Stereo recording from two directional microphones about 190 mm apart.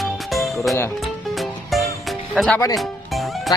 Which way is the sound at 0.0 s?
Centre (ahead or behind).